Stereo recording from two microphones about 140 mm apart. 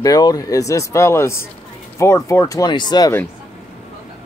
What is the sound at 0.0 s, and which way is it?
Speech, 25° left (ahead or behind).